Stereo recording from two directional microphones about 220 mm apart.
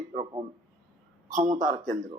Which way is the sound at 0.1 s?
30° right (ahead or behind).